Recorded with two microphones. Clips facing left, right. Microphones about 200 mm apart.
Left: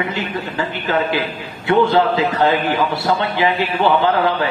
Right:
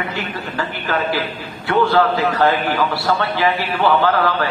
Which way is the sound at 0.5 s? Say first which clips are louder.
Left 2 dB; 20° left (ahead or behind).